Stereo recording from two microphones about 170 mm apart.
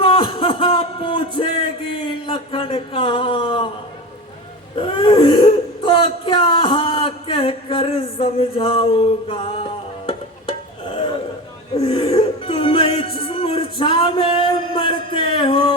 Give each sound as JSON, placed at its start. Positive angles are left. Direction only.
{"t": 0.0, "sound": "a sound", "side_deg": 30}
{"t": 4.7, "sound": "whimper", "side_deg": 30}
{"t": 11.7, "sound": "music", "side_deg": 35}